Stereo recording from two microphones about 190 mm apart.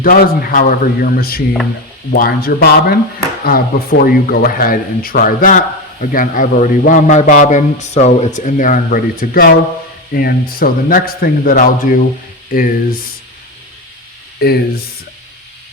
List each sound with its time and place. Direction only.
0.0 s speech: 45° left (ahead or behind)
14.4 s speech: 55° left (ahead or behind)